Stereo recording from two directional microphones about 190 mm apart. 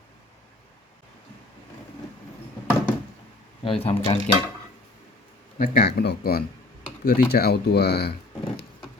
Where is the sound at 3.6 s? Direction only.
30° left (ahead or behind).